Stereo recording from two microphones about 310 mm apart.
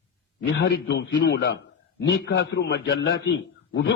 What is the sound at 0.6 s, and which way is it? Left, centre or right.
A man's voice, left.